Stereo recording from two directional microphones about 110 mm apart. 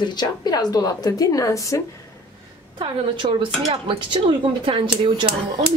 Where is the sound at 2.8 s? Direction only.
45° right (ahead or behind).